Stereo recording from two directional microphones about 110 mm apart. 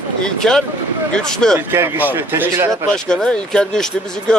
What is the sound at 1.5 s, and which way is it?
Speech, 20° right (ahead or behind).